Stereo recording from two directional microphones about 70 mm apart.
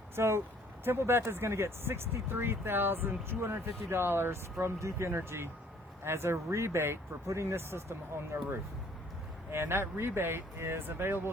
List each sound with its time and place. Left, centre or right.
0.2 s speech: right
4.6 s speech: right